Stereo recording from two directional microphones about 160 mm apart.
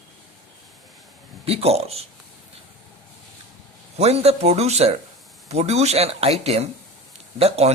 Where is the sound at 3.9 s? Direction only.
40° right (ahead or behind).